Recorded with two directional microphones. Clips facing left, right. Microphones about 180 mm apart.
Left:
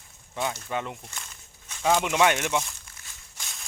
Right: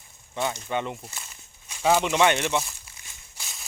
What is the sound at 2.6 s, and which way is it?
Crumpling, 5° right (ahead or behind).